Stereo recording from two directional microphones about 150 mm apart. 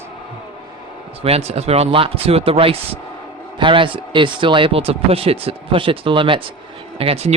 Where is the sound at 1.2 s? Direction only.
45° right (ahead or behind).